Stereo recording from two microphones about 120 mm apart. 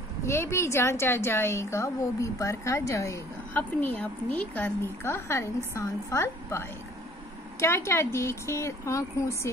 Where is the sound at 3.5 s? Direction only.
15° left (ahead or behind).